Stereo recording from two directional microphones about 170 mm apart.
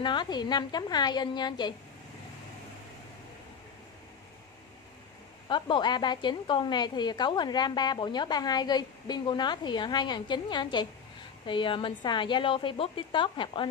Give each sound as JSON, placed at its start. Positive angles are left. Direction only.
{"t": 0.0, "sound": "a woman's voice", "side_deg": 25}
{"t": 5.5, "sound": "a woman's voice", "side_deg": 25}